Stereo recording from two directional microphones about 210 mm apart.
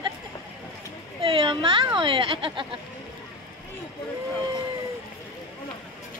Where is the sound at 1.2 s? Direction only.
25° right (ahead or behind).